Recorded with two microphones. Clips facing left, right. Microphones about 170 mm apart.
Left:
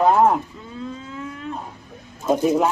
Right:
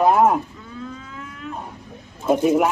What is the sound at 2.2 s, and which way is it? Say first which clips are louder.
Speech: right 1 dB; 15° right (ahead or behind).